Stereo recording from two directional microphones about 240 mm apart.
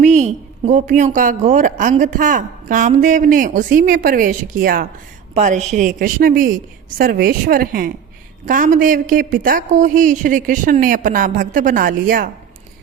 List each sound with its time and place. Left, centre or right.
0.0 s a woman's voice: right